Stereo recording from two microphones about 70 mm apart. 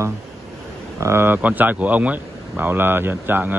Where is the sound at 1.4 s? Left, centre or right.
Right.